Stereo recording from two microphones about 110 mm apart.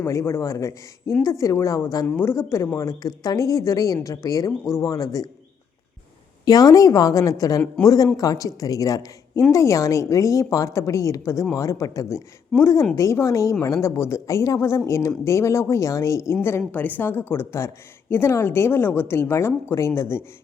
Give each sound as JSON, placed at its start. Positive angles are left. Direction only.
{"t": 0.0, "sound": "a woman's voice", "side_deg": 25}
{"t": 2.0, "sound": "a woman's voice", "side_deg": 20}
{"t": 6.4, "sound": "a woman's voice", "side_deg": 35}